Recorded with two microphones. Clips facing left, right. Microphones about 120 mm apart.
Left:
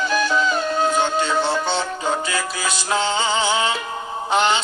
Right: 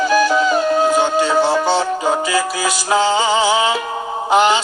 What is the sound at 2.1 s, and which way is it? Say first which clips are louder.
Music: right 6 dB; 25° right (ahead or behind).